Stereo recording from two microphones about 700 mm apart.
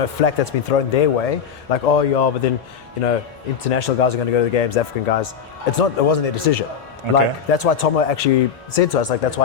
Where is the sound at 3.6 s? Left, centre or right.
Left.